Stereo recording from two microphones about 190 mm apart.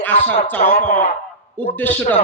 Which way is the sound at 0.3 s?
10° left (ahead or behind).